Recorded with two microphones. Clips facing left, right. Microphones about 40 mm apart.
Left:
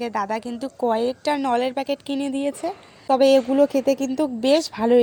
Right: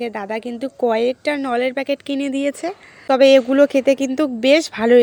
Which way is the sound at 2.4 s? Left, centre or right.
Right.